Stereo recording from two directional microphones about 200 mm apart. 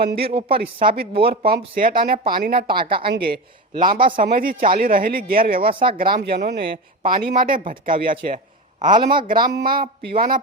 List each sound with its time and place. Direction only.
0.0 s speech: 50° right (ahead or behind)
0.3 s a woman's voice: 30° right (ahead or behind)
0.8 s speech: 50° right (ahead or behind)